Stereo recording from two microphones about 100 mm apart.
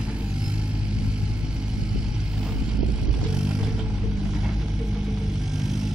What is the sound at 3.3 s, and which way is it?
Vehicle, 10° right (ahead or behind).